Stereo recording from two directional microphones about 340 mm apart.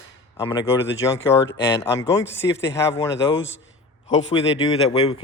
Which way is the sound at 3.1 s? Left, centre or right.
Left.